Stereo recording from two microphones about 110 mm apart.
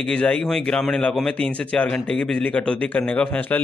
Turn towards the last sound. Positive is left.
turn(degrees=10)  # may be behind; listen again after turning